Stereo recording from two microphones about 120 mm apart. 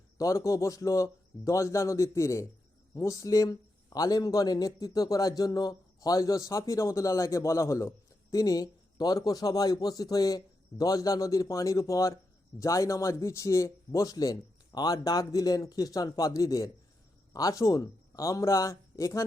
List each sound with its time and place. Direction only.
0.2 s a man's voice: 25° left (ahead or behind)